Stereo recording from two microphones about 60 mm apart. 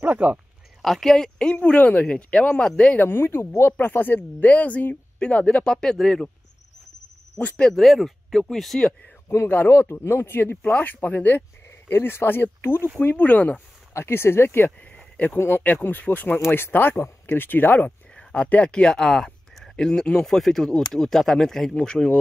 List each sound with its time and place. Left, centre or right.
0.0 s speech: right
0.8 s speech: centre
3.0 s speech: left
3.8 s speech: left; by 6.2 s centre
7.3 s speech: left
7.7 s speech: centre
9.5 s speech: left
10.6 s speech: left
11.9 s speech: left
13.9 s speech: left
15.6 s speech: left
20.2 s speech: centre